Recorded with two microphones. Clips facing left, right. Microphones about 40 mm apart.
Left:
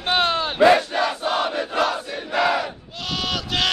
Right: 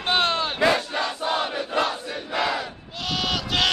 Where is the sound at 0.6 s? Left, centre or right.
Left.